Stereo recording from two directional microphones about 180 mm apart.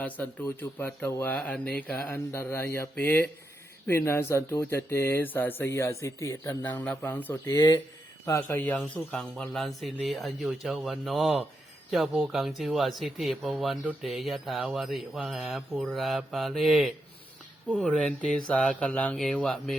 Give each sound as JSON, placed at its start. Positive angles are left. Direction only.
{"t": 0.0, "sound": "speech", "side_deg": 10}
{"t": 7.5, "sound": "speech", "side_deg": 20}